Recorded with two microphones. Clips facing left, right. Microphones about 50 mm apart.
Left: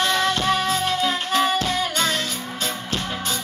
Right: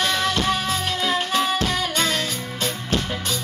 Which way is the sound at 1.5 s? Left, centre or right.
Right.